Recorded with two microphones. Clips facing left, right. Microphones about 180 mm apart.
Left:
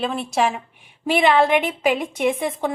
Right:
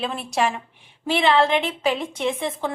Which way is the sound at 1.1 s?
15° left (ahead or behind).